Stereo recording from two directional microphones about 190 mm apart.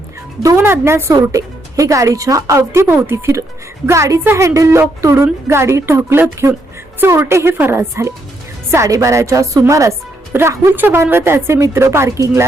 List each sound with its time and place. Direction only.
0.4 s speech: 15° right (ahead or behind)